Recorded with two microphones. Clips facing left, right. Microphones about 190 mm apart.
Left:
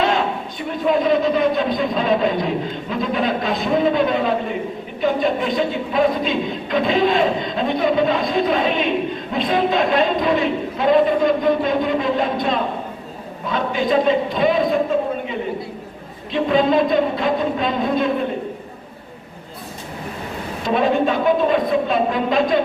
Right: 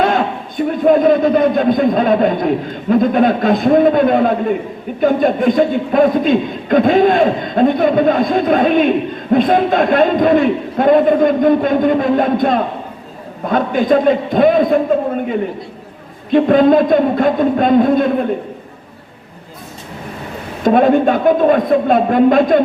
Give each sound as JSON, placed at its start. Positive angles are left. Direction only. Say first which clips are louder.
{"t": 0.0, "sound": "a man's voice", "louder": "right 4 dB", "side_deg": -50}
{"t": 20.7, "sound": "a man's voice", "louder": "right 7 dB", "side_deg": -50}